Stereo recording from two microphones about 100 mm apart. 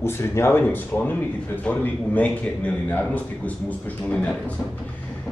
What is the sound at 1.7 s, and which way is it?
Speech, 15° left (ahead or behind).